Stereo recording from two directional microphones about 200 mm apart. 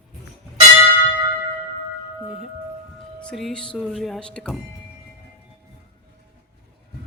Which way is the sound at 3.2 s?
5° left (ahead or behind).